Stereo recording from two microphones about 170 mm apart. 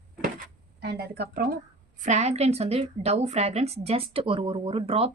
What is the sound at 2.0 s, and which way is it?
A woman's voice, 40° right (ahead or behind).